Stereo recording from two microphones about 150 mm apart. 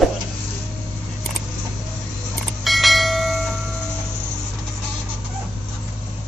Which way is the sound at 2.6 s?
Centre (ahead or behind).